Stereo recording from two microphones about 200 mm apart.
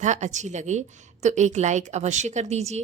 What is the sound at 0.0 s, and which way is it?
A woman's voice, 35° right (ahead or behind).